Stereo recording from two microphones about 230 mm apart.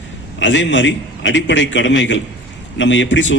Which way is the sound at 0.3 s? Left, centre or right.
Left.